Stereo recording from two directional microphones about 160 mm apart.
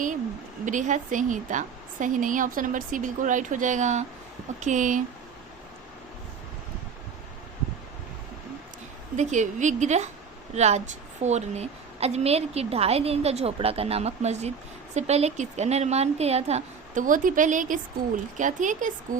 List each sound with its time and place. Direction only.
0.6 s a woman's voice: 50° right (ahead or behind)
9.1 s a woman's voice: 50° right (ahead or behind)